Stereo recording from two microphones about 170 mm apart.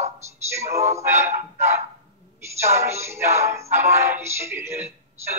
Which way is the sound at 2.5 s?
15° right (ahead or behind).